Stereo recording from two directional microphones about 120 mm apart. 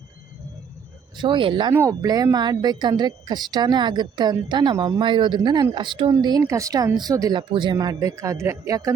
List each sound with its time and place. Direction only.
1.1 s speech: 40° right (ahead or behind)
1.9 s speech: 30° right (ahead or behind)